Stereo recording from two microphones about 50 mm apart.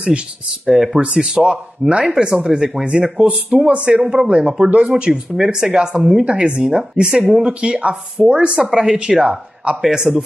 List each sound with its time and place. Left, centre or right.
0.7 s speech: centre